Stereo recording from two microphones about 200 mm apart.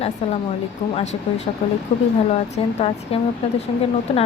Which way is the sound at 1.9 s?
35° left (ahead or behind).